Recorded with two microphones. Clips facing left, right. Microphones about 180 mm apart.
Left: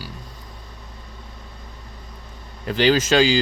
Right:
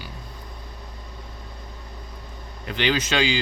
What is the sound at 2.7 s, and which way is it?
Speech, 40° left (ahead or behind).